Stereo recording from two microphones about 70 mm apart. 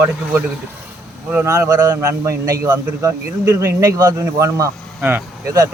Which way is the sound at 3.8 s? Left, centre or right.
Right.